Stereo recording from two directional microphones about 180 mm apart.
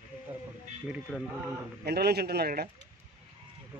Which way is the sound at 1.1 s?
5° left (ahead or behind).